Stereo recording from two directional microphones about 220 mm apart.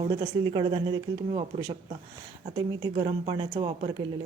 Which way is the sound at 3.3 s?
25° right (ahead or behind).